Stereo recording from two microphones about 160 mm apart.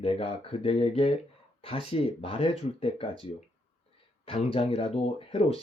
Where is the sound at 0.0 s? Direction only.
35° left (ahead or behind).